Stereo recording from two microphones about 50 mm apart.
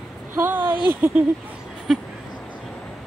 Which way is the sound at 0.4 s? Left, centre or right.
Right.